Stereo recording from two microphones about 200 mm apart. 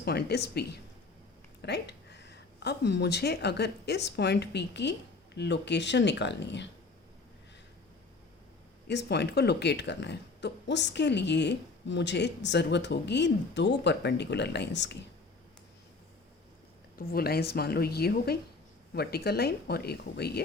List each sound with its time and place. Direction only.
0.0 s speech: 55° left (ahead or behind)
8.9 s speech: 60° left (ahead or behind)
17.0 s speech: 50° left (ahead or behind)